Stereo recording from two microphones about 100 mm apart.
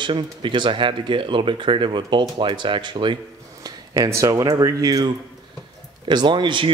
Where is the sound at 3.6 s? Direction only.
40° right (ahead or behind).